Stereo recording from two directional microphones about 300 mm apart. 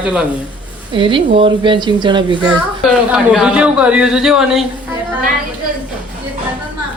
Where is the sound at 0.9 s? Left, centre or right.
Centre.